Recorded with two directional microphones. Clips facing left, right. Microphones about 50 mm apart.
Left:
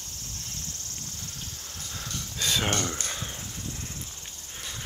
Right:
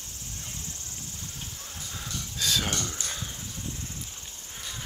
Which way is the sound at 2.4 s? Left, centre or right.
Centre.